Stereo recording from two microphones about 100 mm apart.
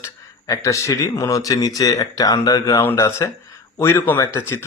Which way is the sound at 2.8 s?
25° left (ahead or behind).